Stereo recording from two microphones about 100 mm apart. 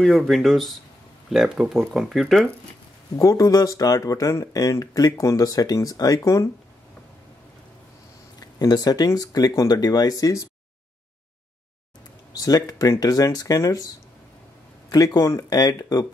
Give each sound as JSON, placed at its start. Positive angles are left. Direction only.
{"t": 0.0, "sound": "speech", "side_deg": 5}
{"t": 3.2, "sound": "speech", "side_deg": 35}
{"t": 8.4, "sound": "speech", "side_deg": 40}
{"t": 12.4, "sound": "speech", "side_deg": 40}
{"t": 14.9, "sound": "speech", "side_deg": 40}